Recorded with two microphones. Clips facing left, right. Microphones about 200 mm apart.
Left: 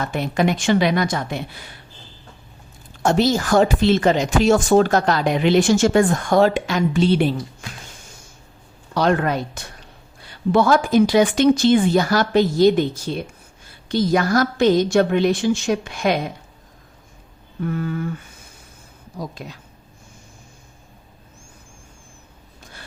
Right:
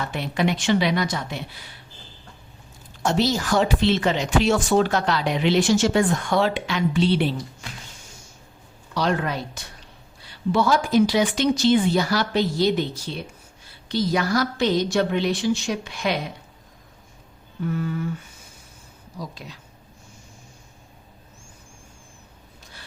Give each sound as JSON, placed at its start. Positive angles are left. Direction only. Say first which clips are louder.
{"t": 0.0, "sound": "speech", "louder": "left 4 dB", "side_deg": 45}
{"t": 3.0, "sound": "speech", "louder": "left 4 dB", "side_deg": 50}
{"t": 9.0, "sound": "speech", "louder": "left 5 dB", "side_deg": 55}
{"t": 17.7, "sound": "a sound", "louder": "left 2 dB", "side_deg": 55}
{"t": 19.1, "sound": "speech", "louder": "left 4 dB", "side_deg": 50}